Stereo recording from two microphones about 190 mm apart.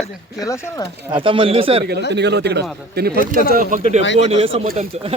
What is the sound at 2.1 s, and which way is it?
A man's voice, 65° right (ahead or behind).